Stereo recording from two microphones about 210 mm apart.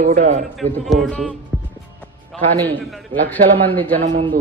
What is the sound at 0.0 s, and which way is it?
Speech, 35° right (ahead or behind).